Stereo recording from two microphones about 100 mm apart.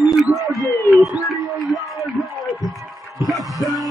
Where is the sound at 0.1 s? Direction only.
Centre (ahead or behind).